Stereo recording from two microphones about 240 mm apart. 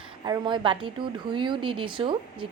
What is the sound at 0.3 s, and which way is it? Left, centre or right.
A woman's voice, centre.